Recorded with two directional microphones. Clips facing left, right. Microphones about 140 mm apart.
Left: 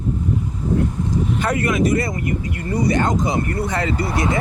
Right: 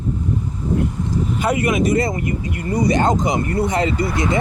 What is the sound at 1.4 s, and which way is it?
Speech, 15° right (ahead or behind).